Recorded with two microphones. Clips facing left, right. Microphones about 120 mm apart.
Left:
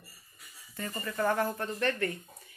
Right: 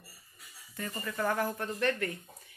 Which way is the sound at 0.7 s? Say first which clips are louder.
Left 2 dB; 5° left (ahead or behind).